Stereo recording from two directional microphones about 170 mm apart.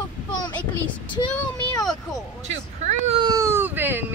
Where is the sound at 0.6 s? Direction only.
10° left (ahead or behind).